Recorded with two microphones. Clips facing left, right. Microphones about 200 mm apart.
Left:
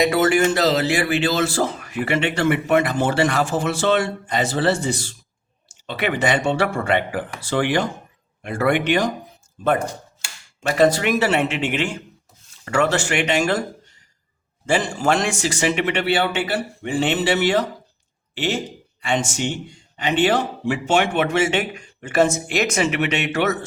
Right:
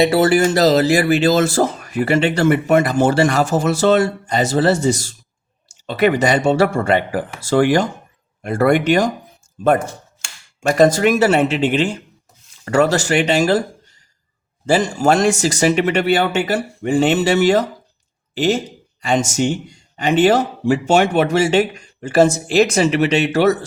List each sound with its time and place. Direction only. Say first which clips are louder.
0.0 s speech: right 4 dB; 30° right (ahead or behind)
9.8 s a sound: left 2 dB; 5° left (ahead or behind)
10.6 s speech: right 4 dB; 45° right (ahead or behind)
14.7 s speech: right 5 dB; 40° right (ahead or behind)